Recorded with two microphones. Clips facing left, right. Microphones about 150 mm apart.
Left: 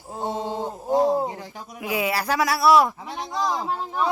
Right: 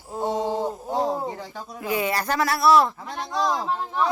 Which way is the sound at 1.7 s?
10° left (ahead or behind).